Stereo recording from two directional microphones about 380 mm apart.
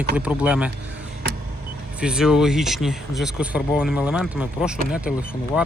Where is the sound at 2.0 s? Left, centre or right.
Centre.